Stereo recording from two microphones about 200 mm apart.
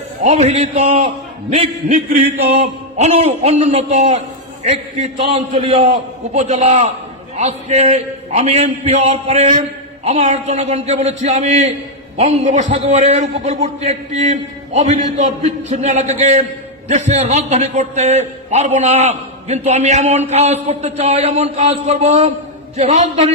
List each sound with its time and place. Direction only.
0.2 s a man's voice: 35° right (ahead or behind)
3.0 s a man's voice: 30° right (ahead or behind)